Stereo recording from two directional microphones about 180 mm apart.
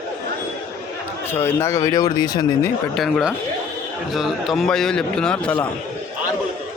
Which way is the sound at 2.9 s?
Centre (ahead or behind).